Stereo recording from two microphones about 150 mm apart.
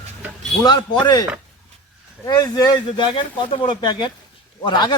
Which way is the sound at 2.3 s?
25° left (ahead or behind).